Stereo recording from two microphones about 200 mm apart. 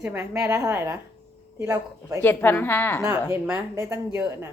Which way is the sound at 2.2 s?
10° left (ahead or behind).